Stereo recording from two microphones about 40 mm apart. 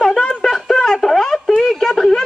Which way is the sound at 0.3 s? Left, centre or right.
Centre.